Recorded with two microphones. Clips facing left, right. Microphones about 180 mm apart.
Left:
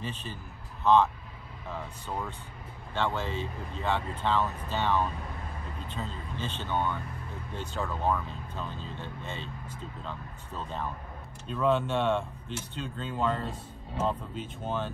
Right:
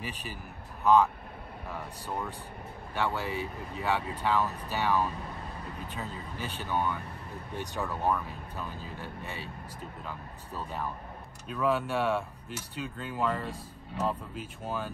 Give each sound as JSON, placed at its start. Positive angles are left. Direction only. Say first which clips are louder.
{"t": 0.0, "sound": "speech", "louder": "left 1 dB", "side_deg": -10}
{"t": 1.7, "sound": "speech", "louder": "left 1 dB", "side_deg": -10}